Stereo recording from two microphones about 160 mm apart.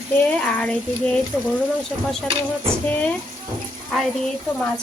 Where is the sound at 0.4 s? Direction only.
5° left (ahead or behind).